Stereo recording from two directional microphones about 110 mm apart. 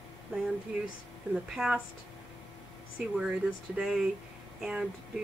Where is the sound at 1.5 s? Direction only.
5° right (ahead or behind).